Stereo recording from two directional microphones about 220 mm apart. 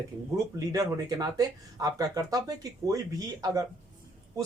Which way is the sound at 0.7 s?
15° right (ahead or behind).